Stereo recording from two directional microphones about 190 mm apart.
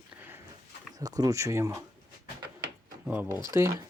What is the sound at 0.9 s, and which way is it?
Speech, 20° right (ahead or behind).